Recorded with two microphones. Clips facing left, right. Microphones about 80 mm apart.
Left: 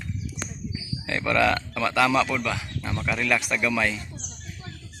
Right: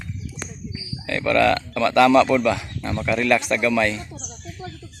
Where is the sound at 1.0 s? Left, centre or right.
Centre.